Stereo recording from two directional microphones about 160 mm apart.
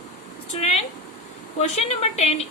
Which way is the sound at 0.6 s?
40° left (ahead or behind).